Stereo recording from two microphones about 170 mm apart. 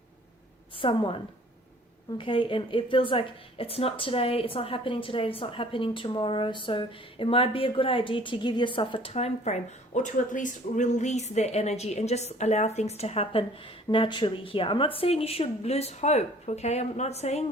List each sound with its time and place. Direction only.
0.8 s a woman's voice: 30° left (ahead or behind)